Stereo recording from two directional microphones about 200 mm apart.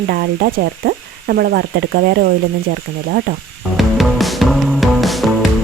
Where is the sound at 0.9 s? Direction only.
50° right (ahead or behind).